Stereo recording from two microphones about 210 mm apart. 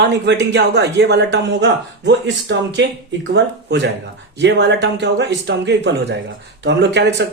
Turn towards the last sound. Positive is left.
turn(degrees=-55)  # may be behind; listen again after turning